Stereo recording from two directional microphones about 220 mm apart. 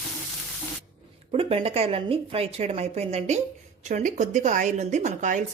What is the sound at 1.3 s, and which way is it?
Speech, 25° right (ahead or behind).